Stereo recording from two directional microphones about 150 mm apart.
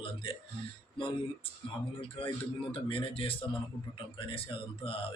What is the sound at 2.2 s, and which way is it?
Speech, 40° left (ahead or behind).